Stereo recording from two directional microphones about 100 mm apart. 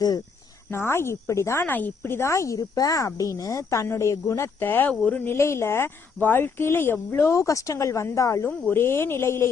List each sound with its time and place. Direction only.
0.7 s speech: 25° left (ahead or behind)